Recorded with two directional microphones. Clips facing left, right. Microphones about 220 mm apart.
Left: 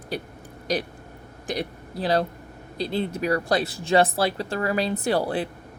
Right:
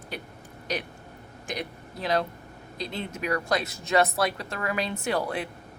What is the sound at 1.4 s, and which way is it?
Speech, 35° left (ahead or behind).